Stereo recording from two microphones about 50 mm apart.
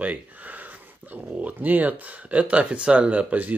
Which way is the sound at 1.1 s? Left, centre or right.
Right.